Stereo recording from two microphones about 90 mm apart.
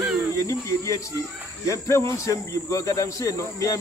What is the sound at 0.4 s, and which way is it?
Speech, 35° left (ahead or behind).